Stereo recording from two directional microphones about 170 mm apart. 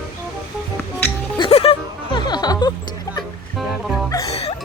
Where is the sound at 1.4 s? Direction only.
35° left (ahead or behind).